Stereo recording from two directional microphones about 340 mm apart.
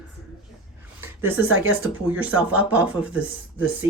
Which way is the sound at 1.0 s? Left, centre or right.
Centre.